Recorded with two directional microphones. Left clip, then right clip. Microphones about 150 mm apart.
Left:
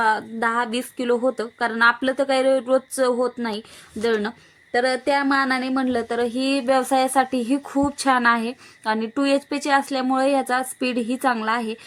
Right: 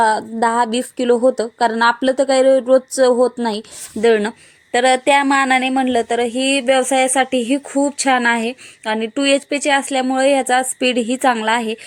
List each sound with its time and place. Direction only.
0.0 s a woman's voice: 25° right (ahead or behind); by 11.8 s 5° right (ahead or behind)